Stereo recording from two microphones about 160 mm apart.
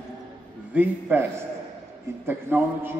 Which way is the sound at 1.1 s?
15° right (ahead or behind).